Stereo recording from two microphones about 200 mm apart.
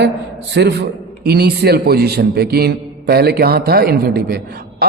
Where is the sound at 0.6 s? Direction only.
60° right (ahead or behind).